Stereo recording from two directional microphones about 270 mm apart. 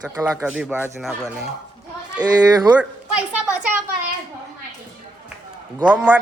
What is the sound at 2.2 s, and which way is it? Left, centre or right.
Speech, centre.